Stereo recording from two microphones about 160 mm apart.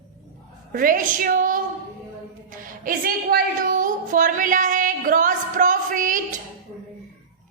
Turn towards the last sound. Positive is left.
turn(degrees=-55)  # may be behind; listen again after turning